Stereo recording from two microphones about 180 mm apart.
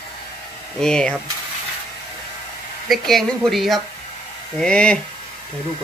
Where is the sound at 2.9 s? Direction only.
Centre (ahead or behind).